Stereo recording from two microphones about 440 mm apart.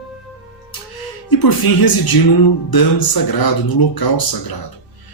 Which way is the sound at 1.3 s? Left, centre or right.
Left.